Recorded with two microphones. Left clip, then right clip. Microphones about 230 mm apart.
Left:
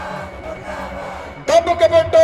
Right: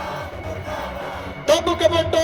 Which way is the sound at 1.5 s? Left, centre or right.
Centre.